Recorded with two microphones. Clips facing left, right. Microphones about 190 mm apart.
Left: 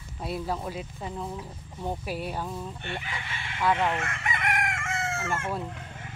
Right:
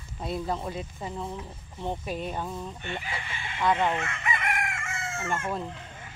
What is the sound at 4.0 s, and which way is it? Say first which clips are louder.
Chicken: even; 60° left (ahead or behind).